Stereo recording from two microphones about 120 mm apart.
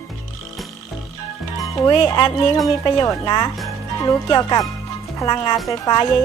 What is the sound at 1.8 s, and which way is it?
Speech, 30° left (ahead or behind).